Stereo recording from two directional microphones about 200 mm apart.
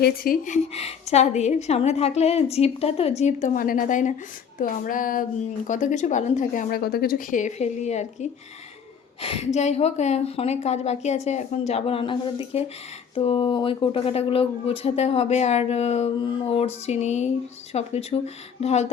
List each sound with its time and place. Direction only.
0.0 s speech: 45° left (ahead or behind)